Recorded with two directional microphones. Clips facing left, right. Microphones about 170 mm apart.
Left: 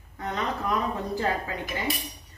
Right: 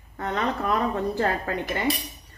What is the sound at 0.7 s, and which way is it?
Speech, 60° right (ahead or behind).